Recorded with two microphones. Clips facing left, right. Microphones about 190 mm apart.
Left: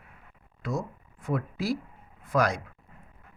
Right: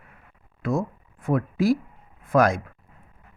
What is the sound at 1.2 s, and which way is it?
Speech, 50° right (ahead or behind).